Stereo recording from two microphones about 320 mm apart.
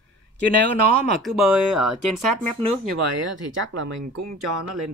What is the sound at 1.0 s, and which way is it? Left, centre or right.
Speech, centre.